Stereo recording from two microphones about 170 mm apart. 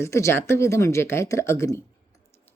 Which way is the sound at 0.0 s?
15° left (ahead or behind).